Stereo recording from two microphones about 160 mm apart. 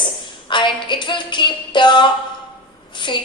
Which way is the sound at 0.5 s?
30° left (ahead or behind).